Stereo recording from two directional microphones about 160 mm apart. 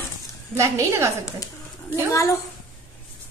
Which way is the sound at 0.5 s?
20° right (ahead or behind).